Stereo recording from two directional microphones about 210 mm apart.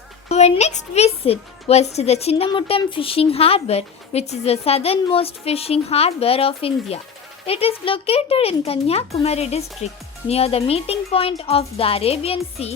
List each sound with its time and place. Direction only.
0.3 s a woman's voice: 30° left (ahead or behind)